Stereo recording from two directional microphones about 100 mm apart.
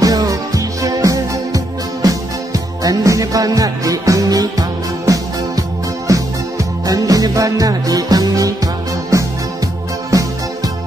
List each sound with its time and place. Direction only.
0.0 s music: 40° right (ahead or behind)